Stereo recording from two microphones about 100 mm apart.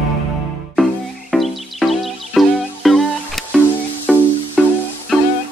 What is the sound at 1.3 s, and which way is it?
Music, centre (ahead or behind).